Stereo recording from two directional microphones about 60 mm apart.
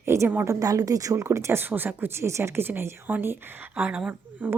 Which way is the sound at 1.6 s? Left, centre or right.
Right.